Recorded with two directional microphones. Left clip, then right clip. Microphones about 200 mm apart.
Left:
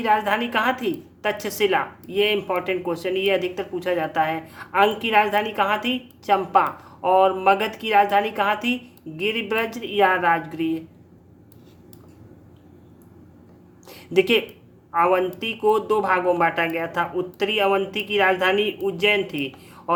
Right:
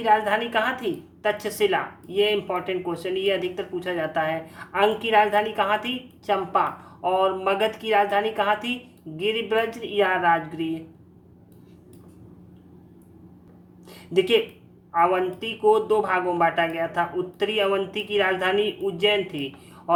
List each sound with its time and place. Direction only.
0.0 s a woman's voice: 20° left (ahead or behind)
13.8 s a sound: 20° left (ahead or behind)
14.9 s a woman's voice: 20° left (ahead or behind)